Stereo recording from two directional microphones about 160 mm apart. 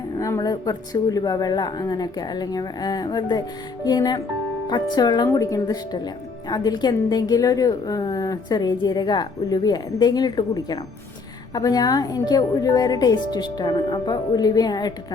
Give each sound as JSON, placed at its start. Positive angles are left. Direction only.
{"t": 0.2, "sound": "a woman's voice", "side_deg": 20}